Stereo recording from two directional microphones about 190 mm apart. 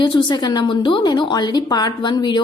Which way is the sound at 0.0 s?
25° left (ahead or behind).